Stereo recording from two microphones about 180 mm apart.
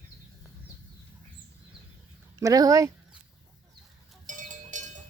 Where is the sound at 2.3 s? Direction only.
20° right (ahead or behind).